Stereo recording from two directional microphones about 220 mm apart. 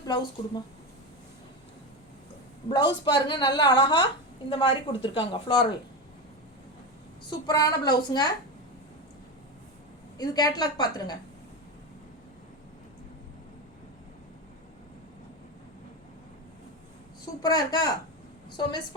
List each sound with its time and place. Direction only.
0.1 s a woman's voice: 20° left (ahead or behind)
2.6 s a woman's voice: 20° left (ahead or behind)
7.3 s a woman's voice: 15° left (ahead or behind)
10.2 s a woman's voice: 15° left (ahead or behind)
17.4 s a woman's voice: 15° left (ahead or behind)